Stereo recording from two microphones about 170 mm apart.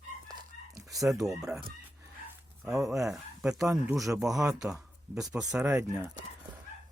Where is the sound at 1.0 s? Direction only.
Centre (ahead or behind).